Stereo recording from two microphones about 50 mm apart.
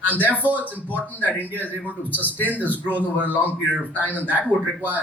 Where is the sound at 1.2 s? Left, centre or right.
Right.